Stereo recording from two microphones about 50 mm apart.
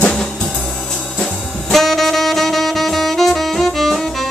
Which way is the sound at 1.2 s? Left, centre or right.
Centre.